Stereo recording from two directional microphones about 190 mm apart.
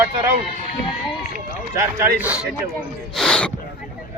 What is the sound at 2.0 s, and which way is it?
A man's voice, 10° right (ahead or behind).